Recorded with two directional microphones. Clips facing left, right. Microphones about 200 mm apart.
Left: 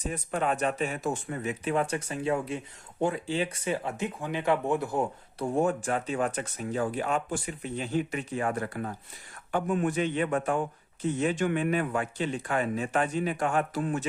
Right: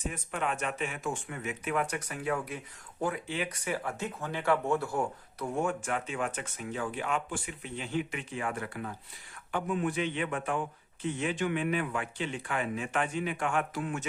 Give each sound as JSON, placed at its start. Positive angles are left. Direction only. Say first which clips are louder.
{"t": 0.0, "sound": "speech", "louder": "left 4 dB", "side_deg": 35}
{"t": 5.4, "sound": "speech", "louder": "left 5 dB", "side_deg": 35}